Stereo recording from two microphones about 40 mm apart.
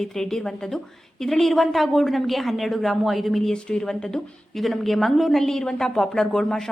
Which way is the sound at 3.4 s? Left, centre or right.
Centre.